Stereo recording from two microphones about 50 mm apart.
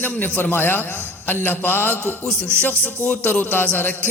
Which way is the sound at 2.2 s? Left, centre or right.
Centre.